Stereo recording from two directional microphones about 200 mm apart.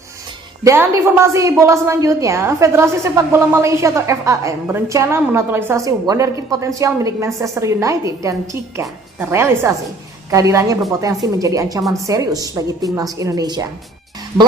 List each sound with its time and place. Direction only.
0.6 s a woman's voice: 10° right (ahead or behind)